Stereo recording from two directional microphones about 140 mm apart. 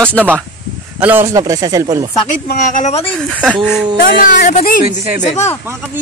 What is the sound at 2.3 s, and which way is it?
Speech, 70° left (ahead or behind).